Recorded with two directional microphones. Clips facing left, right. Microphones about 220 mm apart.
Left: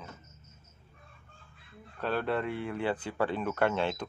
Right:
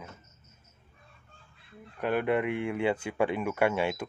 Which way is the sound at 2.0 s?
15° right (ahead or behind).